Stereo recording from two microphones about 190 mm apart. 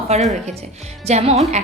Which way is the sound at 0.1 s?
35° right (ahead or behind).